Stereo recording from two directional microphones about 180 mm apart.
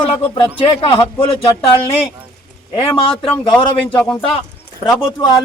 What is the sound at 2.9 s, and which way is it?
Speech, 30° left (ahead or behind).